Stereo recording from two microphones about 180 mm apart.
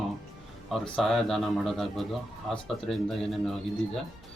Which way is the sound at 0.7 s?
Centre (ahead or behind).